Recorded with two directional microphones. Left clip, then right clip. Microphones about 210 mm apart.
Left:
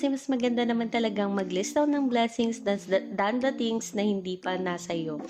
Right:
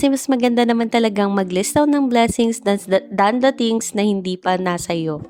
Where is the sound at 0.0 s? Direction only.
50° right (ahead or behind).